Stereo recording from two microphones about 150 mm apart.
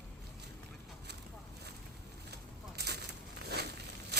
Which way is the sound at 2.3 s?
90° right.